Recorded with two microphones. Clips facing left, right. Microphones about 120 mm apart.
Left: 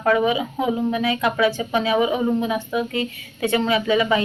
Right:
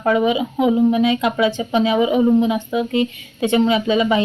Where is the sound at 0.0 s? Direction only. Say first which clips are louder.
Right 2 dB; 20° right (ahead or behind).